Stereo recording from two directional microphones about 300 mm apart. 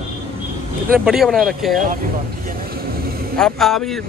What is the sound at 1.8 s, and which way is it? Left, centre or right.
Vehicle, right.